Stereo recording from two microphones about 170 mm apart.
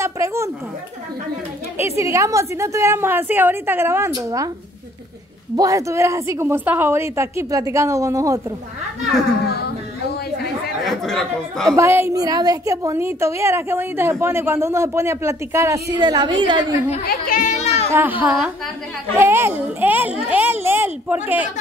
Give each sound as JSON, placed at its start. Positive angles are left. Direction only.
{"t": 0.0, "sound": "a sound", "side_deg": -15}
{"t": 2.0, "sound": "a woman's voice", "side_deg": -15}
{"t": 5.6, "sound": "a woman's voice", "side_deg": -20}
{"t": 10.8, "sound": "speech", "side_deg": 0}
{"t": 11.7, "sound": "a woman's voice", "side_deg": -15}
{"t": 16.9, "sound": "speech", "side_deg": 50}
{"t": 17.9, "sound": "a woman's voice", "side_deg": -10}